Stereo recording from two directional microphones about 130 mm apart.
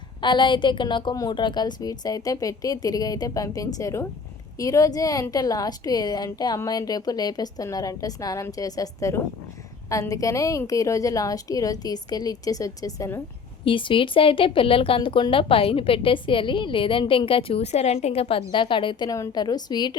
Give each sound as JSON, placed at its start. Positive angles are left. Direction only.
{"t": 0.2, "sound": "a woman's voice", "side_deg": 35}
{"t": 13.7, "sound": "speech", "side_deg": 40}